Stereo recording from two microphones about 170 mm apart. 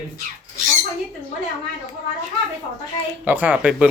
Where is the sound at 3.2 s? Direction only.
10° right (ahead or behind).